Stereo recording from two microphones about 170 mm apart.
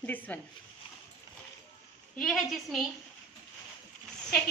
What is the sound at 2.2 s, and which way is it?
Speech, centre (ahead or behind).